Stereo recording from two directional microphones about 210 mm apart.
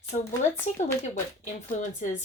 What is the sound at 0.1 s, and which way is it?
Speech, 35° left (ahead or behind).